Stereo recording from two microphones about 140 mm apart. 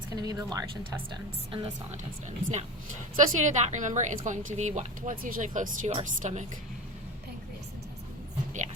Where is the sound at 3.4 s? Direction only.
60° right (ahead or behind).